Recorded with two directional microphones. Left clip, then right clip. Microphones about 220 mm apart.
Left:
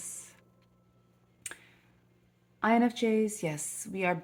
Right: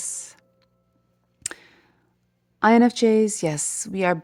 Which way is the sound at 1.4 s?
45° right (ahead or behind).